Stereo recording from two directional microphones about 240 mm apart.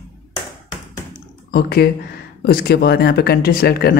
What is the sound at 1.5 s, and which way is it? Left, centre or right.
Speech, left.